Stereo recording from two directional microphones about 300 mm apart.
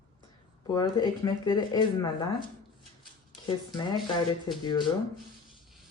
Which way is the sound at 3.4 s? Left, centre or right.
Centre.